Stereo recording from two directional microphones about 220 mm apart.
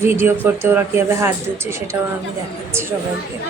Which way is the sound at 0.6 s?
10° right (ahead or behind).